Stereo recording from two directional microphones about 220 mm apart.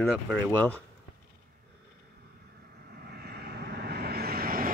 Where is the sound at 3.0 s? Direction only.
45° right (ahead or behind).